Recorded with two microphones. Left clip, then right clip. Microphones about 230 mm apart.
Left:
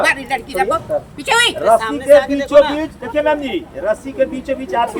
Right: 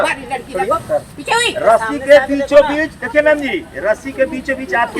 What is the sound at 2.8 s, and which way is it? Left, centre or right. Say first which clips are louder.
Speech: right 4 dB; centre.